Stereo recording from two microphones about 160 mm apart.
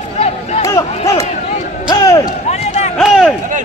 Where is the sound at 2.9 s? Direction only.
Centre (ahead or behind).